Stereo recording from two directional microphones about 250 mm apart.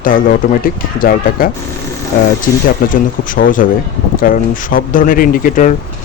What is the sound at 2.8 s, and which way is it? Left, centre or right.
Speech, left.